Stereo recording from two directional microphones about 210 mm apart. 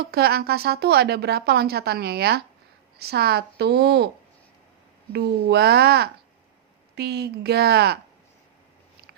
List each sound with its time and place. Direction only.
0.0 s a woman's voice: 50° right (ahead or behind)
5.1 s a woman's voice: 50° right (ahead or behind)